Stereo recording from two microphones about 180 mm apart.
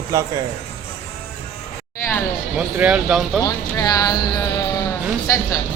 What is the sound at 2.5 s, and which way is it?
Speech, 5° right (ahead or behind).